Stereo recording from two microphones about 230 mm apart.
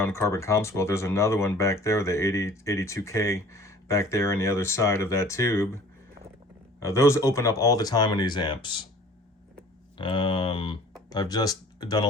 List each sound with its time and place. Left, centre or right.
0.0 s speech: centre
10.0 s speech: left